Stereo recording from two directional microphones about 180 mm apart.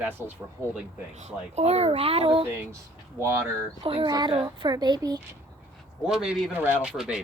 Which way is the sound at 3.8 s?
30° right (ahead or behind).